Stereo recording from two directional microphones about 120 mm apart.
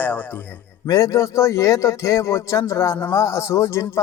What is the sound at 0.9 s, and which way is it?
Speech, 30° left (ahead or behind).